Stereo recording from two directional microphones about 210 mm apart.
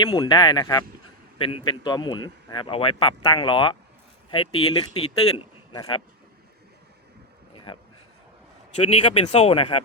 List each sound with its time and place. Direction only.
0.0 s a man's voice: 25° left (ahead or behind)
7.5 s a sound: 25° left (ahead or behind)
8.9 s speech: 30° left (ahead or behind)